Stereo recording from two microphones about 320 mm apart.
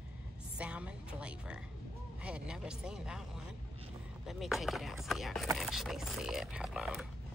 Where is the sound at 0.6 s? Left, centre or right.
Centre.